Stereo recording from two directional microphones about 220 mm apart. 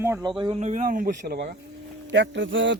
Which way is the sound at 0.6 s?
35° right (ahead or behind).